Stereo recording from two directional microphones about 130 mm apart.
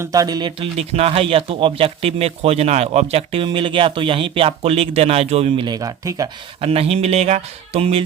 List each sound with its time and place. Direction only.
0.0 s speech: 25° right (ahead or behind)
0.6 s speech: 50° right (ahead or behind)
5.6 s speech: 30° right (ahead or behind)
6.6 s speech: 50° right (ahead or behind)